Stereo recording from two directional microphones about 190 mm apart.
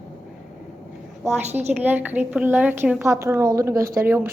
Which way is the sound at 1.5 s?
35° right (ahead or behind).